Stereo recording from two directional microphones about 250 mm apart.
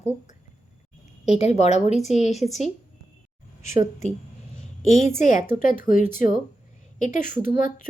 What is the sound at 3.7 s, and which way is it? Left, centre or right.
Speech, centre.